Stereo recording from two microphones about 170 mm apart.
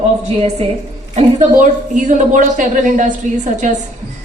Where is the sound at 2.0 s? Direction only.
45° right (ahead or behind).